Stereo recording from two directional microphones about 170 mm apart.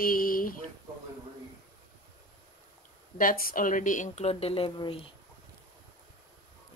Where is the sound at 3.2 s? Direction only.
55° left (ahead or behind); by 5.0 s 35° left (ahead or behind).